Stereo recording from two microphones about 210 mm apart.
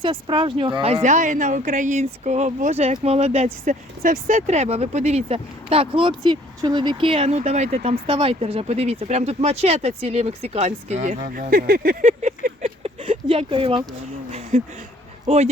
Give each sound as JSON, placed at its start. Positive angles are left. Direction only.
{"t": 0.0, "sound": "speech", "side_deg": -25}
{"t": 1.0, "sound": "speech", "side_deg": -35}